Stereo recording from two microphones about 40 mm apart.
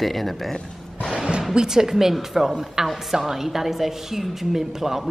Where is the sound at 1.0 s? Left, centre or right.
Centre.